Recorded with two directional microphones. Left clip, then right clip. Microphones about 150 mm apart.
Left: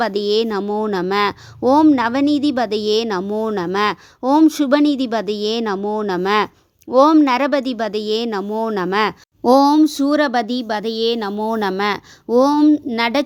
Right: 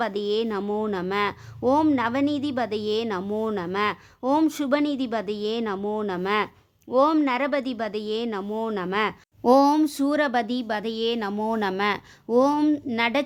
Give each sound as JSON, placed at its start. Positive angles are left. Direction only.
{"t": 0.0, "sound": "speech", "side_deg": 40}
{"t": 9.4, "sound": "speech", "side_deg": 30}
{"t": 13.0, "sound": "speech", "side_deg": 40}